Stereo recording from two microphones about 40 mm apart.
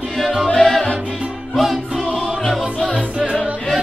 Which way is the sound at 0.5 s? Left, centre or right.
Centre.